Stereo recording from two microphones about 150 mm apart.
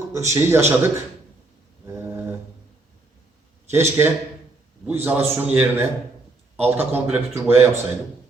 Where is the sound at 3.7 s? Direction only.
15° right (ahead or behind).